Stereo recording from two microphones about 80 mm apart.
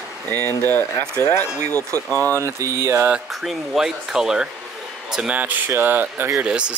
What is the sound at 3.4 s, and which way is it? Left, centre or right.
Speech, centre.